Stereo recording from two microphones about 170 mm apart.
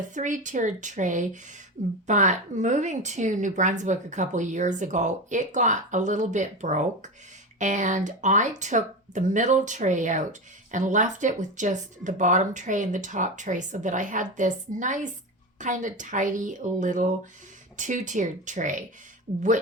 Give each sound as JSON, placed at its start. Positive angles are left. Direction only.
{"t": 0.1, "sound": "a woman's voice", "side_deg": -45}